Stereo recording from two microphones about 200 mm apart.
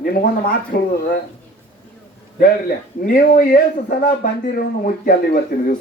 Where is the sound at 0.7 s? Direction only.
50° left (ahead or behind).